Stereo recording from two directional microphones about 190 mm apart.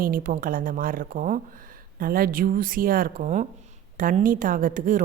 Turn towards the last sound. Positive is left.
turn(degrees=-45)  # may be behind; listen again after turning